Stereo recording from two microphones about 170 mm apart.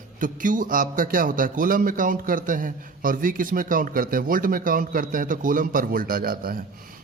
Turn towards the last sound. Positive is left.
turn(degrees=-60)  # may be behind; listen again after turning